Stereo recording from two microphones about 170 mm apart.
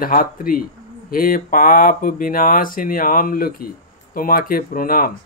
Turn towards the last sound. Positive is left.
turn(degrees=55)  # may be behind; listen again after turning